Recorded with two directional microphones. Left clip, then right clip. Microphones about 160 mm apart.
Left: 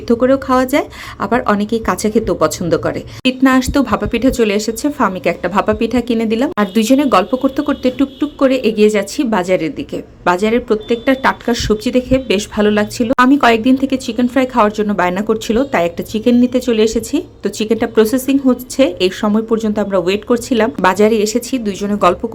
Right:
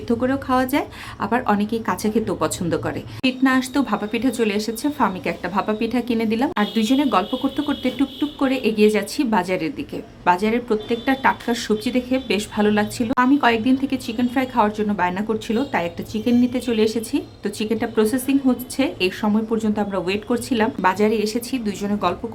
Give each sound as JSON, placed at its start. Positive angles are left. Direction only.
{"t": 0.1, "sound": "speech", "side_deg": 30}
{"t": 6.7, "sound": "speech", "side_deg": 35}
{"t": 13.1, "sound": "a woman's voice", "side_deg": 35}